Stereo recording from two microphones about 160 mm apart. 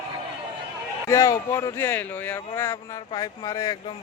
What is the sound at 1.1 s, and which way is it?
Speech, 20° left (ahead or behind).